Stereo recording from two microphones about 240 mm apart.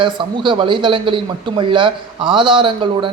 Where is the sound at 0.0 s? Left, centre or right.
Right.